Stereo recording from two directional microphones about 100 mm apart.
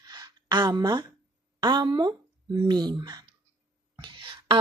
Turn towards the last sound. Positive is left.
turn(degrees=-55)  # may be behind; listen again after turning